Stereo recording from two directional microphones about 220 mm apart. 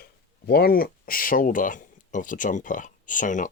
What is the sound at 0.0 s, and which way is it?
Speech, 45° left (ahead or behind).